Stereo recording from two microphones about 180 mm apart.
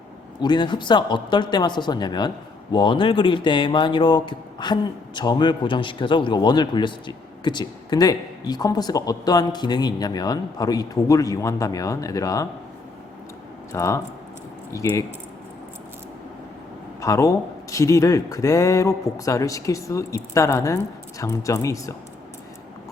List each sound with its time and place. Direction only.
0.4 s speech: 25° left (ahead or behind)
13.7 s speech: 15° left (ahead or behind)
17.0 s speech: 15° left (ahead or behind)